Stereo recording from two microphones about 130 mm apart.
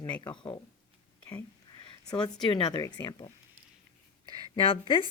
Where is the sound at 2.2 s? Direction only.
35° left (ahead or behind).